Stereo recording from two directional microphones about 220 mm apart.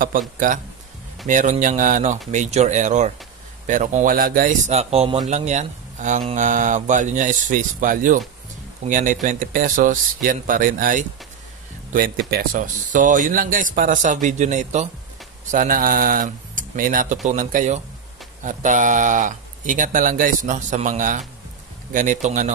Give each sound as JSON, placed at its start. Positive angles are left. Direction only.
{"t": 0.1, "sound": "speech", "side_deg": -40}